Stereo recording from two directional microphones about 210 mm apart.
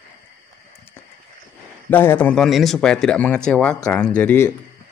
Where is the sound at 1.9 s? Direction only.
10° left (ahead or behind).